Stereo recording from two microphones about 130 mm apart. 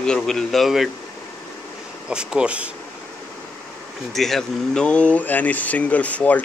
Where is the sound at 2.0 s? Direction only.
5° right (ahead or behind).